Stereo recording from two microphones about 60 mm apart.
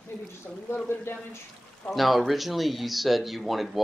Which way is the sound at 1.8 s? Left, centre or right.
Centre.